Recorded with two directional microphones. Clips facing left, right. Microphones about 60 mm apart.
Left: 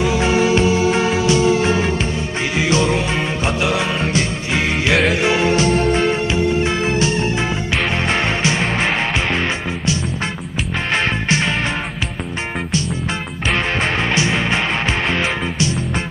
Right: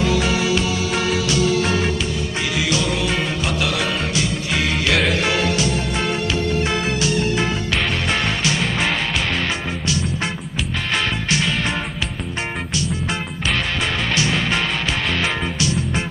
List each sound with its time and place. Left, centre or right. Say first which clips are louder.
0.0 s music: left 3 dB; left
6.3 s music: left 3 dB; left
10.9 s music: left 3 dB; left
13.7 s music: left 3 dB; left